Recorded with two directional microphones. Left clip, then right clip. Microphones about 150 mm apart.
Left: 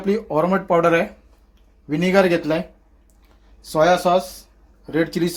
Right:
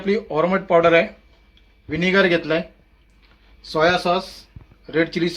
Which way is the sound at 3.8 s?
80° left.